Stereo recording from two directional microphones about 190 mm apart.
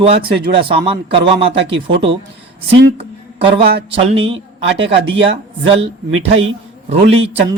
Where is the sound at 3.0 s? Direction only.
30° right (ahead or behind).